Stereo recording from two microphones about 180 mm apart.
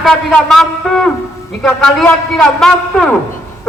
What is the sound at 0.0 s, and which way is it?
A man's voice, 5° left (ahead or behind).